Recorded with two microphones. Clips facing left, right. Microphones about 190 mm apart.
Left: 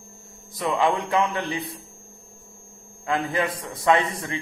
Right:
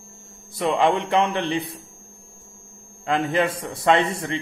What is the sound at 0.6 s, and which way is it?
Speech, 30° right (ahead or behind).